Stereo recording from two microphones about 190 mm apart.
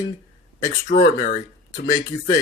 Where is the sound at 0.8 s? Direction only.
50° left (ahead or behind).